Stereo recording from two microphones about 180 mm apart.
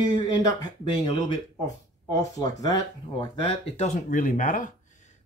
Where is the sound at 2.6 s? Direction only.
20° left (ahead or behind).